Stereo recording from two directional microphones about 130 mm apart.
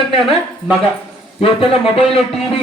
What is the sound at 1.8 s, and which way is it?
Speech, 50° left (ahead or behind).